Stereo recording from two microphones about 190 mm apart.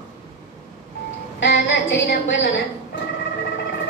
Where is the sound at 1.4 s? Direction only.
65° left (ahead or behind).